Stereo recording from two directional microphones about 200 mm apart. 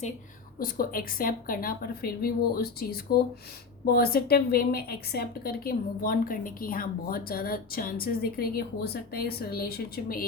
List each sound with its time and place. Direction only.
0.6 s a woman's voice: 45° left (ahead or behind)